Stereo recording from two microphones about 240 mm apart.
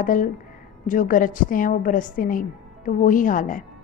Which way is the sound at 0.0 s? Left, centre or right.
Left.